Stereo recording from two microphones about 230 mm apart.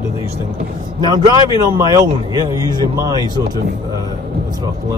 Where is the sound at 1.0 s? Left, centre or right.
Centre.